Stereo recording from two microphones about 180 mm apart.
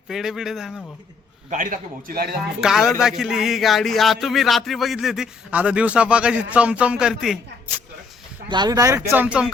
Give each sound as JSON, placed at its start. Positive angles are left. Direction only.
{"t": 0.1, "sound": "speech", "side_deg": 0}
{"t": 1.5, "sound": "a man's voice", "side_deg": -50}
{"t": 2.6, "sound": "speech", "side_deg": -5}
{"t": 8.4, "sound": "speech", "side_deg": -25}
{"t": 9.0, "sound": "speech", "side_deg": -10}